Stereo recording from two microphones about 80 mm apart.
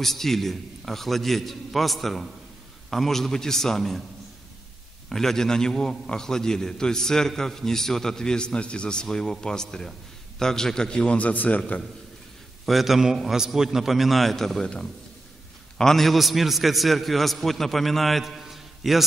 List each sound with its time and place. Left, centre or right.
0.0 s a man's voice: centre
5.1 s a man's voice: centre
12.6 s a man's voice: centre